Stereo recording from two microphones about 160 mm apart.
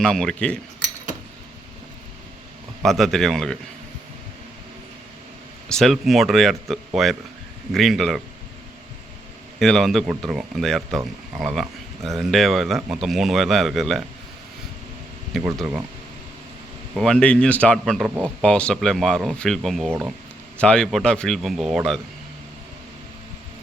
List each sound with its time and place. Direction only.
0.0 s speech: 5° left (ahead or behind)
2.8 s speech: centre (ahead or behind)
5.6 s speech: 5° left (ahead or behind)
9.6 s speech: centre (ahead or behind)
15.5 s speech: 5° right (ahead or behind)
16.9 s speech: centre (ahead or behind)
19.9 s speech: 10° right (ahead or behind)
20.6 s speech: 5° left (ahead or behind)